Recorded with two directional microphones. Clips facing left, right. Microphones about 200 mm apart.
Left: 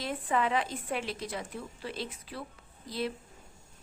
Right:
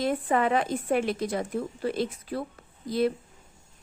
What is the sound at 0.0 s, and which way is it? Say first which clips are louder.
A woman's voice: right 6 dB; 50° right (ahead or behind).